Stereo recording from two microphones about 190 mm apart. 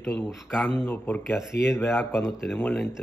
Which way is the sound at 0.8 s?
10° left (ahead or behind).